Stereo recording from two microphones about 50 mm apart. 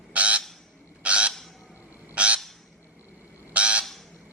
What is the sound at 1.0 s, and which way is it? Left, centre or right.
Bird, right.